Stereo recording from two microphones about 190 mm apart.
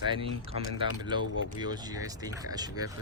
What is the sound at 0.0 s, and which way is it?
Speech, 25° right (ahead or behind).